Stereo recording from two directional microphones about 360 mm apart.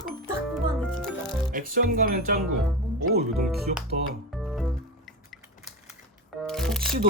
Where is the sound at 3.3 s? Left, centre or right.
Centre.